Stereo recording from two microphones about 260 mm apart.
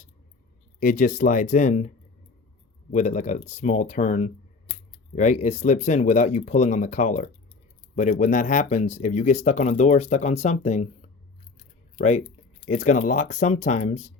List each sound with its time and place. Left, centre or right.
0.8 s speech: left
2.9 s speech: left
11.9 s speech: left